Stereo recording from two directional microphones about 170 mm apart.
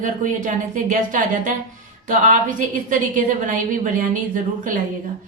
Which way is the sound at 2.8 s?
50° right (ahead or behind).